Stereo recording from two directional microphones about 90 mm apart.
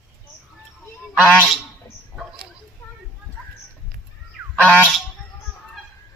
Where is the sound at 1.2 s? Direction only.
10° left (ahead or behind).